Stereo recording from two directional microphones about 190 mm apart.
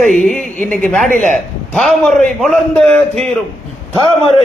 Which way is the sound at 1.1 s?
40° right (ahead or behind).